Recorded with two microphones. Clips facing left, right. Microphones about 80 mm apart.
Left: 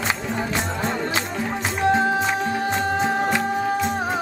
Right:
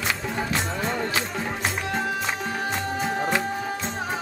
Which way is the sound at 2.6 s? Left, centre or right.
Left.